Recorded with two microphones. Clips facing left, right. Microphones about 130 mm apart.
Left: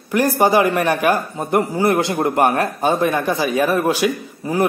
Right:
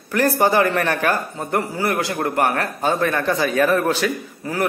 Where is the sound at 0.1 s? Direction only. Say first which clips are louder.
Left 2 dB; 15° left (ahead or behind).